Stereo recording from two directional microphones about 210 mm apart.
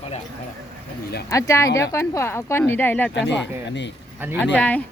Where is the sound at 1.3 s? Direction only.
15° left (ahead or behind).